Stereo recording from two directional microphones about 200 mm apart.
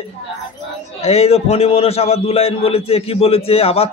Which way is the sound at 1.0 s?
30° left (ahead or behind).